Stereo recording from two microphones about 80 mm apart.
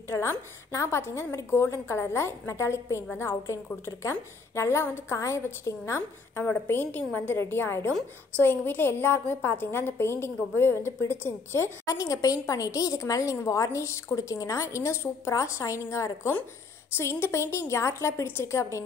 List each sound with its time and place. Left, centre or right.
0.1 s a woman's voice: left
11.8 s a woman's voice: left
16.9 s a woman's voice: left